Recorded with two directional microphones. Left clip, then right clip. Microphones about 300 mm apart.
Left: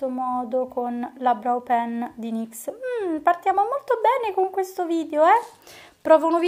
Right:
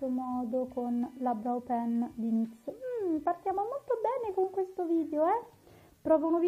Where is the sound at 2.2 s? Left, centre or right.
Left.